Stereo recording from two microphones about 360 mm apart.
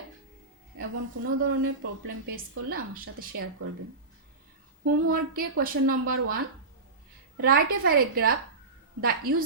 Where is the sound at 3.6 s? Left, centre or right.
Right.